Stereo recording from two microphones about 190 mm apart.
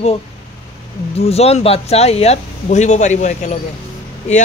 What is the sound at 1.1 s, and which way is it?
Speech, 35° left (ahead or behind).